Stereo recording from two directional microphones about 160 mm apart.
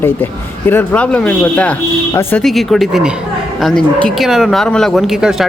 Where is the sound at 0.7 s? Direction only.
10° left (ahead or behind).